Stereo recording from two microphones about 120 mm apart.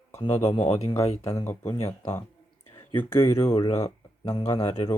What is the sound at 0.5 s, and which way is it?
Speech, 60° left (ahead or behind).